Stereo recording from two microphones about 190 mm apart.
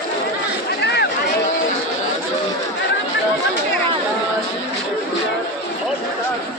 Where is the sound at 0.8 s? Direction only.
60° left (ahead or behind).